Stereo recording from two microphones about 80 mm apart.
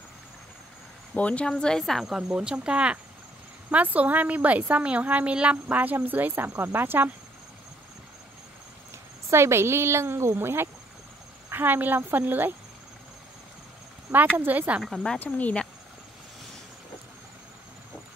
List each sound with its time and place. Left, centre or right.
1.1 s speech: centre
1.5 s a woman's voice: centre; by 7.1 s right
9.3 s a woman's voice: right
14.4 s a woman's voice: right
14.8 s speech: centre
15.1 s speech: left